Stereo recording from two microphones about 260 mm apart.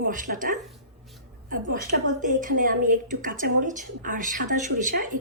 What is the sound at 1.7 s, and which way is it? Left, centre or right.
A woman's voice, right.